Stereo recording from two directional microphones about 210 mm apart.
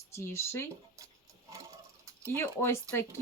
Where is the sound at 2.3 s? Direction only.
10° left (ahead or behind).